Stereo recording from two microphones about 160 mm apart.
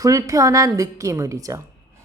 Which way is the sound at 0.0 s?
20° right (ahead or behind).